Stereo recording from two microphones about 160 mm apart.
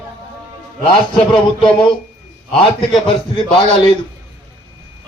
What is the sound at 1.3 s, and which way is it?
A man's voice, 30° left (ahead or behind).